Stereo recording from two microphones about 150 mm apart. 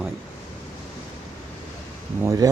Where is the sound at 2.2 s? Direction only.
25° right (ahead or behind).